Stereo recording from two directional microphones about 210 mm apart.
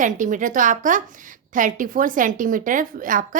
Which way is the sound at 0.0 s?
40° right (ahead or behind).